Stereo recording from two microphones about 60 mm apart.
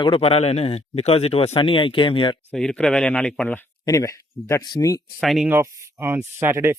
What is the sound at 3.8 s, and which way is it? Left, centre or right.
Speech, left.